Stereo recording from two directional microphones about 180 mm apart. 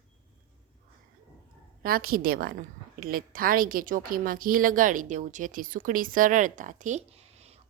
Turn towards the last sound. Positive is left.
turn(degrees=-35)  # may be behind; listen again after turning